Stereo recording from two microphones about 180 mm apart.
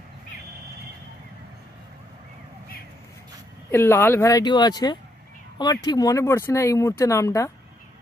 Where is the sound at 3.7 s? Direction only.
15° left (ahead or behind).